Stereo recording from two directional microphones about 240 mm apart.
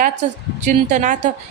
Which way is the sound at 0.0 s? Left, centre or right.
Right.